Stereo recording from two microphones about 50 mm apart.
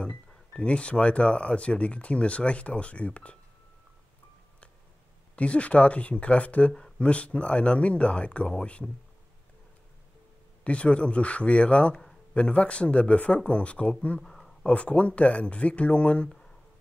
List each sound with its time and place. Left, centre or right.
0.0 s speech: left
5.3 s speech: left
10.6 s speech: left
11.9 s a sound: centre
12.4 s speech: left
14.2 s a sound: centre
14.6 s speech: left